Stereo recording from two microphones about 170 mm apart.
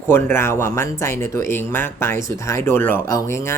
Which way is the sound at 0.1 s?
15° left (ahead or behind).